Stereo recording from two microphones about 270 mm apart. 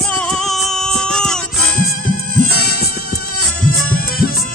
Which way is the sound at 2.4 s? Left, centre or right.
Left.